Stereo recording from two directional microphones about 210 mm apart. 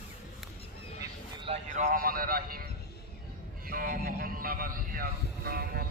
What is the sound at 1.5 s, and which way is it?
Speech, 35° right (ahead or behind).